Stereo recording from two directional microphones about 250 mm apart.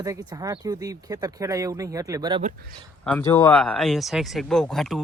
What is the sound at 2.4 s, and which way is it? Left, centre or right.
Speech, right.